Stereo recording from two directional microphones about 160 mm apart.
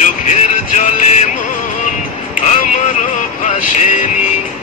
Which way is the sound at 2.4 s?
50° left (ahead or behind).